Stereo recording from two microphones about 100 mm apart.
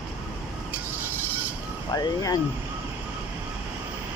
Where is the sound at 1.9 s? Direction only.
40° left (ahead or behind).